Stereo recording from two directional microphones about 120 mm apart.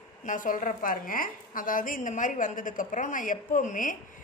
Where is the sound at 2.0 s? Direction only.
90° left.